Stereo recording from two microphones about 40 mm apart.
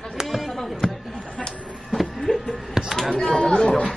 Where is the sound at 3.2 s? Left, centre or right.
Centre.